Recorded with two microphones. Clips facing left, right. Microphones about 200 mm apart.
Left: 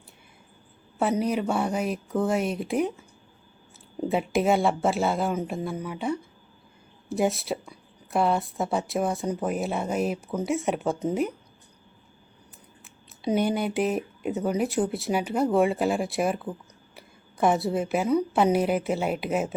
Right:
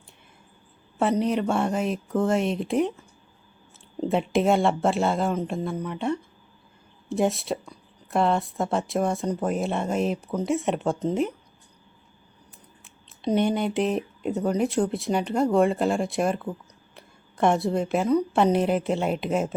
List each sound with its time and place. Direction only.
0.9 s speech: centre (ahead or behind)
4.0 s speech: 5° left (ahead or behind)
12.8 s speech: 5° left (ahead or behind)